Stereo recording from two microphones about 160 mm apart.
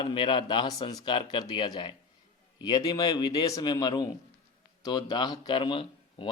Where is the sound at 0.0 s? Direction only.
30° left (ahead or behind).